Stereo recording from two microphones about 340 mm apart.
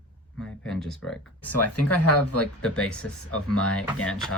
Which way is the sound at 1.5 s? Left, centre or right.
Left.